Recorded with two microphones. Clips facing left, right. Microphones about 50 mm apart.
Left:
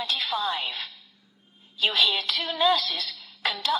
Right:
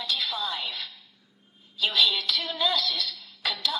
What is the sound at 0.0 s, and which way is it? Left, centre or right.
Music, left.